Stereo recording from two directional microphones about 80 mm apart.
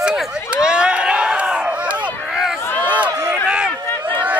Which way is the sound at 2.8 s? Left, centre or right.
Centre.